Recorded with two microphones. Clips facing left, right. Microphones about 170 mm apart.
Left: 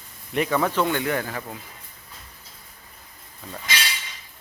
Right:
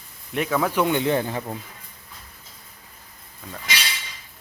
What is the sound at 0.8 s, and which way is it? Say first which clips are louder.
Speech: right 3 dB; 20° right (ahead or behind).